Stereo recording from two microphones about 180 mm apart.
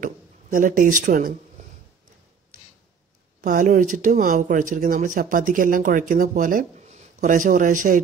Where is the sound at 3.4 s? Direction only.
45° right (ahead or behind).